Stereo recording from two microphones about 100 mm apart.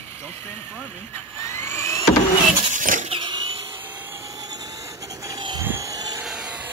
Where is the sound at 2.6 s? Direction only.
70° right (ahead or behind).